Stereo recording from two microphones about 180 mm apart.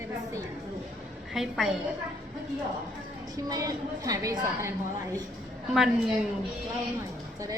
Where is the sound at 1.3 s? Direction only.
Centre (ahead or behind).